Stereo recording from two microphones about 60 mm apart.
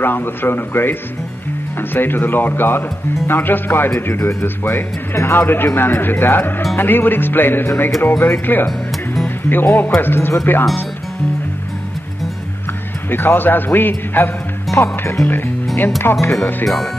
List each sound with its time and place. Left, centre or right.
0.0 s speech: left
8.6 s music: centre
9.5 s speech: left
13.1 s speech: left
14.7 s speech: left
15.2 s speech: left
16.6 s speech: centre